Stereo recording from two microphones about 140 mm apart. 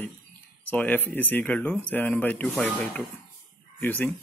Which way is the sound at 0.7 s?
10° left (ahead or behind).